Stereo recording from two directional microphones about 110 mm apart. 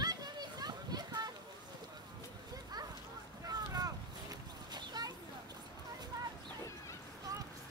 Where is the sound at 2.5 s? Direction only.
35° right (ahead or behind).